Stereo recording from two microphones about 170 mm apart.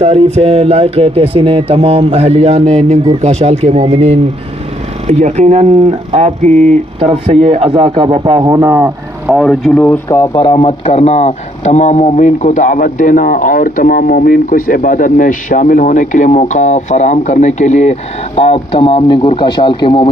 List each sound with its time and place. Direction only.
0.0 s speech: 40° right (ahead or behind)
8.5 s speech: 20° right (ahead or behind)
9.4 s speech: centre (ahead or behind)
10.0 s speech: 20° left (ahead or behind)
10.4 s speech: 30° left (ahead or behind)